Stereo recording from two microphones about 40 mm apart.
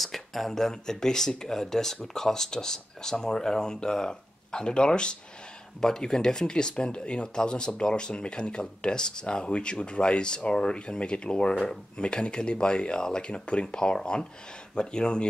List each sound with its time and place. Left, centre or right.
0.0 s speech: centre; by 15.2 s left